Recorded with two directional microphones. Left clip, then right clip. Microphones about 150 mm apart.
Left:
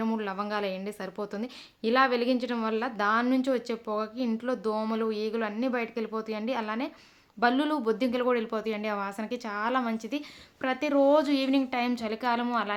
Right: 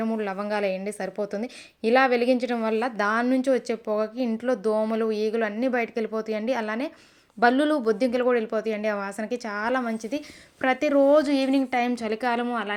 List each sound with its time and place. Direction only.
0.0 s a woman's voice: 15° right (ahead or behind)
10.6 s a woman's voice: 30° right (ahead or behind); by 12.7 s 10° right (ahead or behind)